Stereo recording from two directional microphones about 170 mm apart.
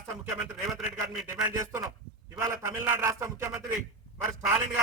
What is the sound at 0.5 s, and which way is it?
Speech, centre (ahead or behind).